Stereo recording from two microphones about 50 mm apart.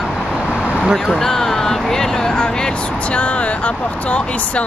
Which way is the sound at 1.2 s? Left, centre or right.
Centre.